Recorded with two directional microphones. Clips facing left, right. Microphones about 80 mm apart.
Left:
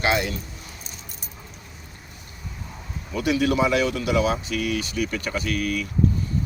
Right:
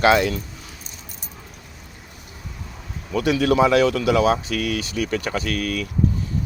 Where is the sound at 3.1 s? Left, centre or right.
Right.